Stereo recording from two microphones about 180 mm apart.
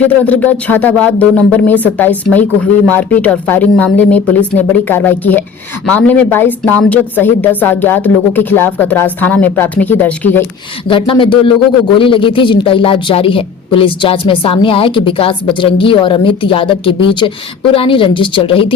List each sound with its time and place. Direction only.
0.3 s speech: 10° left (ahead or behind)
10.8 s a woman's voice: 30° left (ahead or behind)